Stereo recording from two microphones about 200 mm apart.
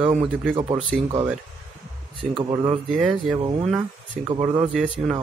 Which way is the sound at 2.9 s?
5° right (ahead or behind).